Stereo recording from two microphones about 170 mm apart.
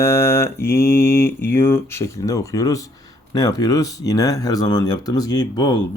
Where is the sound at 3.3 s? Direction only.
20° left (ahead or behind).